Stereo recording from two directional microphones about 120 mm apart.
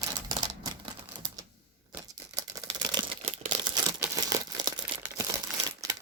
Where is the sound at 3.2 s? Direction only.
55° right (ahead or behind).